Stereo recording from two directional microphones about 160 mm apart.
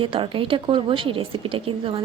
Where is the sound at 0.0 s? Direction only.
35° right (ahead or behind).